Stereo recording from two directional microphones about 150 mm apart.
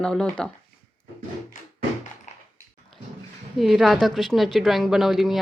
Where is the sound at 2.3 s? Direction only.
50° left (ahead or behind).